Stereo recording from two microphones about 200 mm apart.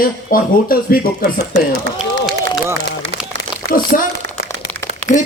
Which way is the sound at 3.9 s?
45° left (ahead or behind).